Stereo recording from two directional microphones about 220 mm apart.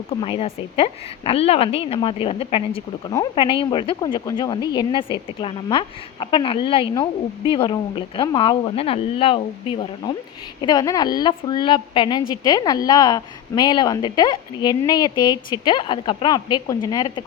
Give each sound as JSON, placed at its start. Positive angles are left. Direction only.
{"t": 0.1, "sound": "a woman's voice", "side_deg": 25}